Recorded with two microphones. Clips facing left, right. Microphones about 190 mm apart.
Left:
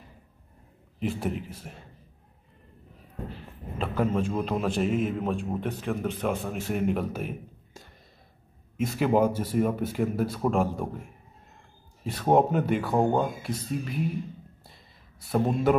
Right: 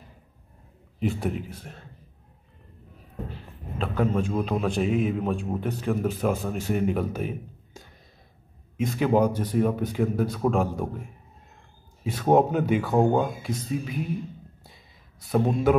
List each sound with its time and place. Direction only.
0.9 s a man's voice: centre (ahead or behind)
3.7 s a man's voice: 5° left (ahead or behind)
12.0 s a man's voice: centre (ahead or behind)
15.3 s a man's voice: centre (ahead or behind)